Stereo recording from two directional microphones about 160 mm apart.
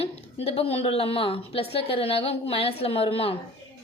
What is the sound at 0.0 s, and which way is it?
A woman's voice, 40° left (ahead or behind).